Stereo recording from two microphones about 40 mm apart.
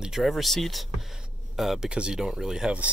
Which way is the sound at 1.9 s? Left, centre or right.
Right.